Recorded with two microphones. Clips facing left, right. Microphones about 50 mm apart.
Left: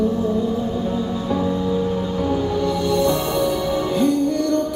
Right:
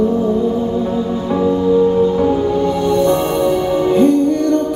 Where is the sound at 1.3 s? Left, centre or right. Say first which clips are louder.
Right 9 dB; right.